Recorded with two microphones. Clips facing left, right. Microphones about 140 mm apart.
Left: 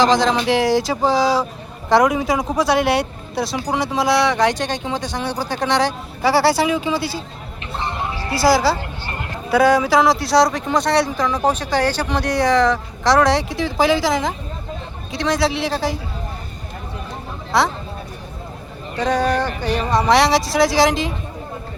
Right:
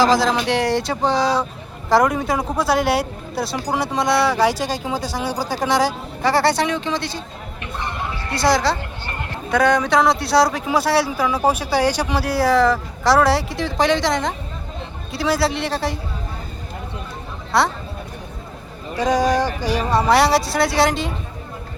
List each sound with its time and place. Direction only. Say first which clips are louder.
0.0 s speech: left 1 dB; 5° right (ahead or behind)
6.2 s speech: left 2 dB; 5° left (ahead or behind)
7.8 s a sound: left 3 dB; 20° left (ahead or behind)
8.3 s speech: left 2 dB; 5° left (ahead or behind)
17.5 s speech: even; centre (ahead or behind)
18.9 s speech: right 1 dB; 10° right (ahead or behind)